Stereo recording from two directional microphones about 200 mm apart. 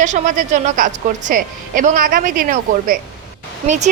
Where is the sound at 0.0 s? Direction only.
40° right (ahead or behind).